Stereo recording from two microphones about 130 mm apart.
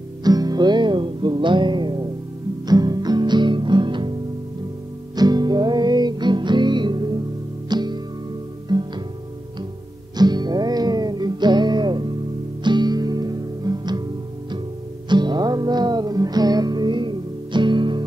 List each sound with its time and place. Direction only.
0.2 s music: 30° right (ahead or behind)
5.1 s music: 30° right (ahead or behind)
10.1 s music: 35° right (ahead or behind)
15.0 s music: 35° right (ahead or behind)